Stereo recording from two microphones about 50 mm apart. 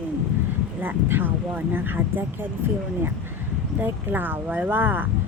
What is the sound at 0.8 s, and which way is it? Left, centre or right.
Speech, right.